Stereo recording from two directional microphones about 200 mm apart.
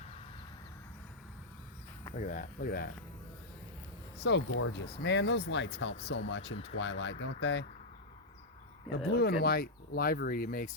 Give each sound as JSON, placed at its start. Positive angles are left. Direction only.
{"t": 2.1, "sound": "speech", "side_deg": 40}
{"t": 4.2, "sound": "speech", "side_deg": 60}
{"t": 4.9, "sound": "speech", "side_deg": 55}
{"t": 9.1, "sound": "speech", "side_deg": 55}